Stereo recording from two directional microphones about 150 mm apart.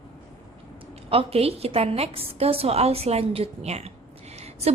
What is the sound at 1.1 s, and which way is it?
A woman's voice, 40° right (ahead or behind).